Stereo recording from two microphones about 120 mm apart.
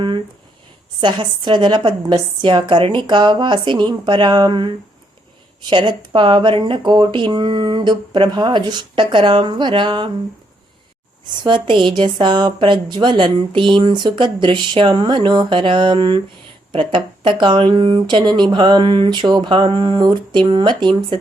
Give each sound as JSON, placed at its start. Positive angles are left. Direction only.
{"t": 1.0, "sound": "a woman's voice", "side_deg": -40}
{"t": 11.4, "sound": "a woman's voice", "side_deg": -40}